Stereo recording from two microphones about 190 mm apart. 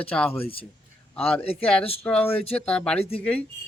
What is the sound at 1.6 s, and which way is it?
Speech, 5° left (ahead or behind).